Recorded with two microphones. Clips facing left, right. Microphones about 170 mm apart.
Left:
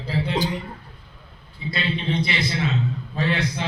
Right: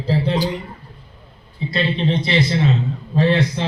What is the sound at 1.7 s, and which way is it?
A man's voice, 35° right (ahead or behind).